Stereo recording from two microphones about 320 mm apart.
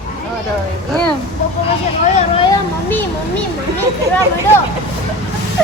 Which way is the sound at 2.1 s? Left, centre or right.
Centre.